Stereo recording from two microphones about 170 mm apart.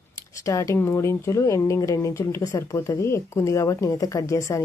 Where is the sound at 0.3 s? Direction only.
20° left (ahead or behind).